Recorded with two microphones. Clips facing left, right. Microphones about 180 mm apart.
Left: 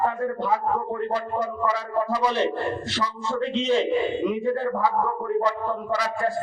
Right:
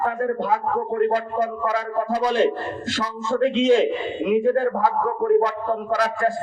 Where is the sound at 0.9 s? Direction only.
60° right (ahead or behind).